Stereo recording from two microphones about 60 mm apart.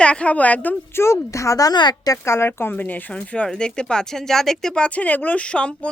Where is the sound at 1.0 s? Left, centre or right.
Left.